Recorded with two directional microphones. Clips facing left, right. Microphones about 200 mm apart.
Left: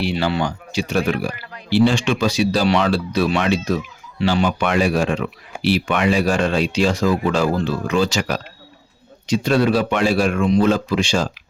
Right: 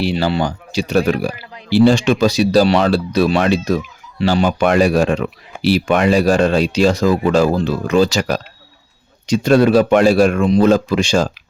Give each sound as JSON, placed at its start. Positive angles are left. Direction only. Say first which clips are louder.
{"t": 0.0, "sound": "a man's voice", "louder": "right 3 dB", "side_deg": -35}